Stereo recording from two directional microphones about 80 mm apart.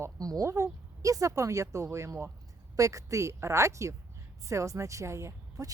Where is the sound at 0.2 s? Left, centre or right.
Right.